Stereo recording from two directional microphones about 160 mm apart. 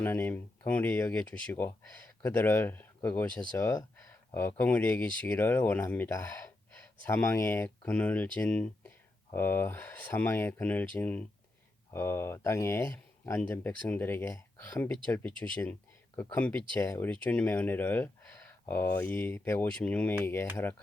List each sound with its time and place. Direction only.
0.0 s speech: 15° left (ahead or behind)